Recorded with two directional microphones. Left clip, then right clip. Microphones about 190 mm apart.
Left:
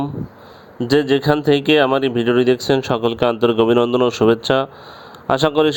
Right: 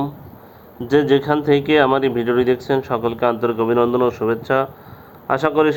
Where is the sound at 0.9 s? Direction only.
45° left (ahead or behind).